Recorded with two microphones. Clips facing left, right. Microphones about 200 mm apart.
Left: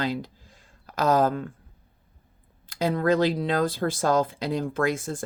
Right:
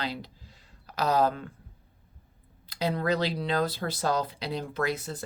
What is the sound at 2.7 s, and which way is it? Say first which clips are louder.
Speech: left 5 dB; 50° left (ahead or behind).